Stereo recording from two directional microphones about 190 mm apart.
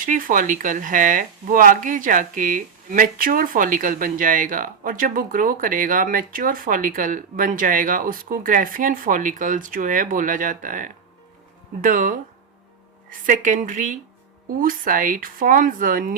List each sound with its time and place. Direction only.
0.0 s speech: 45° right (ahead or behind)